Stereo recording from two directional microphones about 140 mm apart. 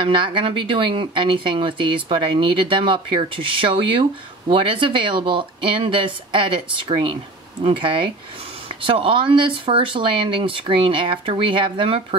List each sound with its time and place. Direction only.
0.0 s speech: 35° right (ahead or behind)